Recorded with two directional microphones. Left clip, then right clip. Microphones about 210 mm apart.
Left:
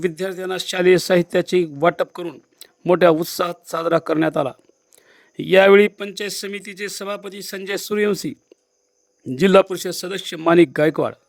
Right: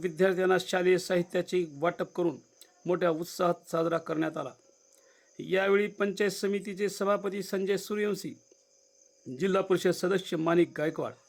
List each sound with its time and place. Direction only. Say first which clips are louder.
0.3 s speech: even; 5° right (ahead or behind)
0.6 s speech: left 11 dB; 45° left (ahead or behind)